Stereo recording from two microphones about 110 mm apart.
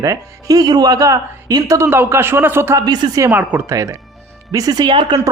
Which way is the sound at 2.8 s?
35° right (ahead or behind).